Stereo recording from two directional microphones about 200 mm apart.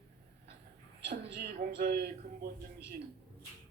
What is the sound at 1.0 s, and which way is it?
Speech, 50° right (ahead or behind).